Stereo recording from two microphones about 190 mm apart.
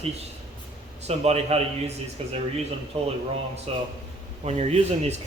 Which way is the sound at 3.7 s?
35° right (ahead or behind).